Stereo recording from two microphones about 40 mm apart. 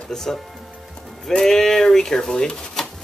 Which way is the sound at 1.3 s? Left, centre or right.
Centre.